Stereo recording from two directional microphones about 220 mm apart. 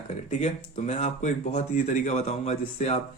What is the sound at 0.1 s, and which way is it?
Speech, 30° left (ahead or behind).